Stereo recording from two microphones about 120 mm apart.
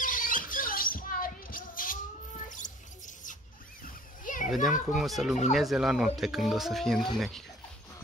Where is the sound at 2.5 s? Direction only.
90° left.